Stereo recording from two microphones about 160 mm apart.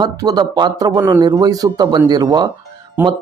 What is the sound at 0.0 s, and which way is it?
Speech, 25° right (ahead or behind).